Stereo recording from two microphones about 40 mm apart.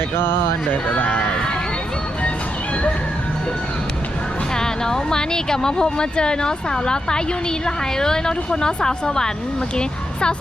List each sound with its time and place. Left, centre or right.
0.2 s speech: left
0.7 s speech: left
1.3 s a sound: centre
4.5 s speech: centre